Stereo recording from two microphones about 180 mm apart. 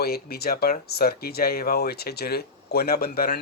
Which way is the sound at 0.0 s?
60° left (ahead or behind).